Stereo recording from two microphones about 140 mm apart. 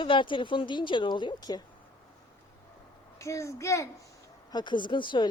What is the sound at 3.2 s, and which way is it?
Speech, 20° left (ahead or behind).